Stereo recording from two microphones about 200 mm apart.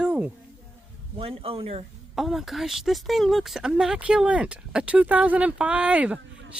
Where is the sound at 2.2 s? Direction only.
Centre (ahead or behind).